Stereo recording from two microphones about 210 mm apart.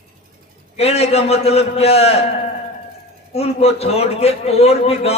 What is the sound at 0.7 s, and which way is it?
A man's voice, 30° left (ahead or behind).